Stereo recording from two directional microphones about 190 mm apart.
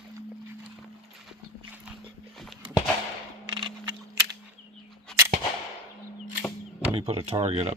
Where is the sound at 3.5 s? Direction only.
25° right (ahead or behind).